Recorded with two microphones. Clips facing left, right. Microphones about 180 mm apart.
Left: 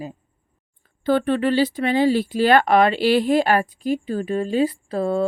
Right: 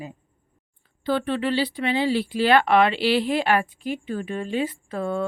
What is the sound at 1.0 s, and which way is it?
Speech, 50° left (ahead or behind).